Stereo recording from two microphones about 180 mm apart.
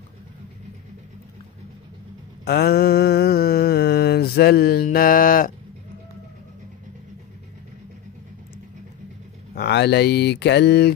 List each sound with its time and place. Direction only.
2.4 s mantra: 60° left (ahead or behind)
9.6 s speech: 70° left (ahead or behind)